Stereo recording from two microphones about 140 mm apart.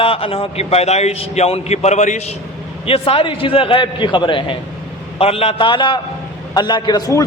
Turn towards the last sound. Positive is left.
turn(degrees=25)  # may be behind; listen again after turning